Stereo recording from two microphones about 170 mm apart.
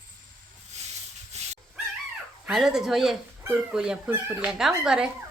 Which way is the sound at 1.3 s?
40° right (ahead or behind).